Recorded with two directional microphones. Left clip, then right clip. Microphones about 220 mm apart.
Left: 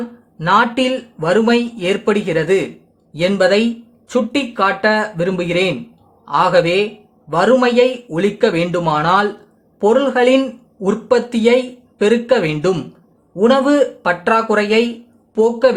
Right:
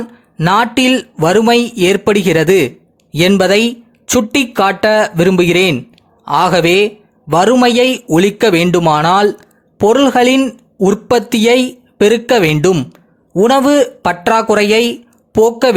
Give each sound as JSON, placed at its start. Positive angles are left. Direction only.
{"t": 0.3, "sound": "a man's voice", "side_deg": -45}